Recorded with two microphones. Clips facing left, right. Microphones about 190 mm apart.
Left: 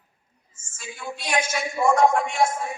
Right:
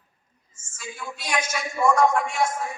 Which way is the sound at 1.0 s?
30° left (ahead or behind).